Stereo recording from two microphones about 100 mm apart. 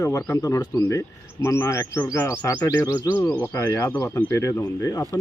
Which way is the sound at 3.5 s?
30° left (ahead or behind).